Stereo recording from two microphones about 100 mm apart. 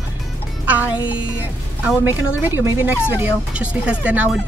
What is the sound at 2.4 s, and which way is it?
Speech, 20° right (ahead or behind).